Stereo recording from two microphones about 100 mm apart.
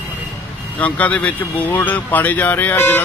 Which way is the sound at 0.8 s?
15° left (ahead or behind).